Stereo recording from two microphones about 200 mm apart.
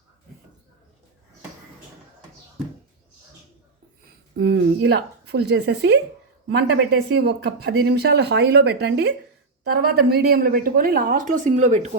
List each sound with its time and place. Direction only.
4.4 s speech: 60° right (ahead or behind); by 11.9 s 35° right (ahead or behind)